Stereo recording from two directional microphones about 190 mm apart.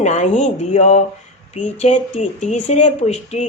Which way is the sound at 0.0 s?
40° left (ahead or behind).